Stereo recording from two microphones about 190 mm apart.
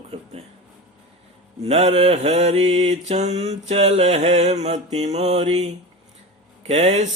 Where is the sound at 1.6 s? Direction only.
35° right (ahead or behind).